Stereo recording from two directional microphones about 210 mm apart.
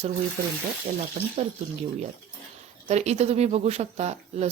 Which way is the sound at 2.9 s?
30° right (ahead or behind).